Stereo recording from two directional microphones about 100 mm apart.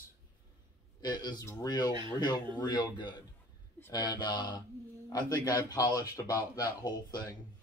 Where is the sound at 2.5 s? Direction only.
45° left (ahead or behind).